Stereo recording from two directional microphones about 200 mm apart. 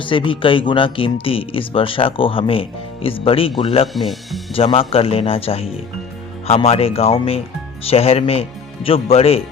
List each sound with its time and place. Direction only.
0.0 s speech: 25° left (ahead or behind)
3.9 s speech: centre (ahead or behind)
4.5 s speech: 30° left (ahead or behind)